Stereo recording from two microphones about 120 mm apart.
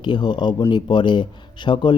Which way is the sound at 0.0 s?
40° left (ahead or behind).